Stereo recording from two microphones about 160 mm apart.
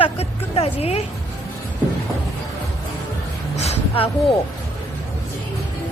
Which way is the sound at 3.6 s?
40° left (ahead or behind).